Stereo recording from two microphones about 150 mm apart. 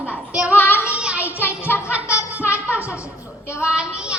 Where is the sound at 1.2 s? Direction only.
15° left (ahead or behind).